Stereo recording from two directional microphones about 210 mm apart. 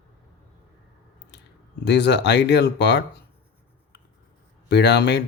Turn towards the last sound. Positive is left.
turn(degrees=55)  # may be behind; listen again after turning